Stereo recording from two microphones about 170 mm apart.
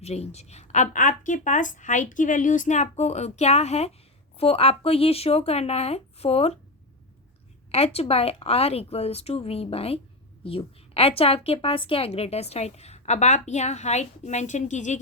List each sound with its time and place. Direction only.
0.0 s a woman's voice: 40° left (ahead or behind)
7.7 s a woman's voice: 35° left (ahead or behind)